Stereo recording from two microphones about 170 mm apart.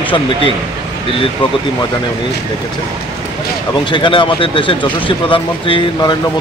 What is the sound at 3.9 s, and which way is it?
Speech, 30° left (ahead or behind).